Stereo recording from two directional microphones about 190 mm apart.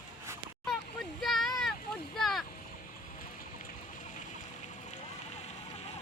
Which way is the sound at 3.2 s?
45° left (ahead or behind).